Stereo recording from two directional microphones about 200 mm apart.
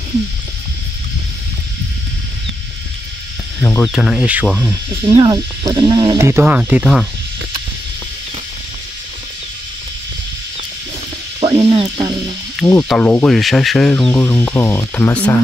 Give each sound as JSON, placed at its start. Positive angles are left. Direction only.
{"t": 3.6, "sound": "speech", "side_deg": 5}
{"t": 5.0, "sound": "speech", "side_deg": -20}
{"t": 11.3, "sound": "music", "side_deg": -25}
{"t": 12.5, "sound": "speech", "side_deg": 5}